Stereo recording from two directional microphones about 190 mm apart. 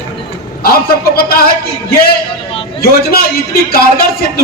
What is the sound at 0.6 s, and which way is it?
Speech, 55° left (ahead or behind).